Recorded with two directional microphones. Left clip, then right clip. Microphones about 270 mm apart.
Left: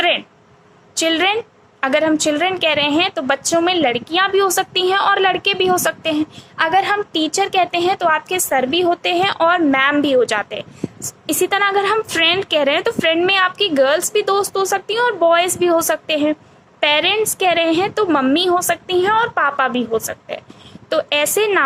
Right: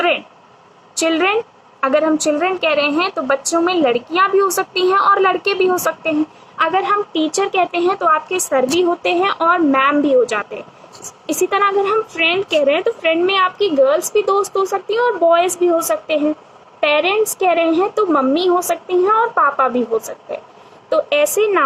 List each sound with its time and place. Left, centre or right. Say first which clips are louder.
0.9 s a woman's voice: right 1 dB; left